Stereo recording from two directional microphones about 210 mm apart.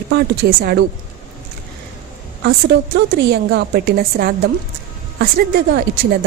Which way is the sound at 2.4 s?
55° right (ahead or behind).